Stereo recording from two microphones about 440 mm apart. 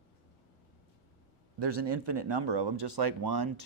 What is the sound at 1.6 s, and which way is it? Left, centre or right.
Speech, right.